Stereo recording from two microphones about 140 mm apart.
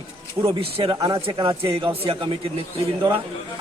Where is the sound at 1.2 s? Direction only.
40° right (ahead or behind).